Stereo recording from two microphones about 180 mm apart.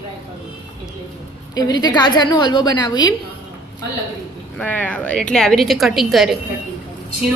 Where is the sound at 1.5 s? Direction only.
20° left (ahead or behind).